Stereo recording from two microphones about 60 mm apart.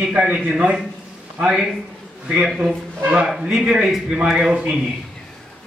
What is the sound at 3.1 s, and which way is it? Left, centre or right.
Speech, centre.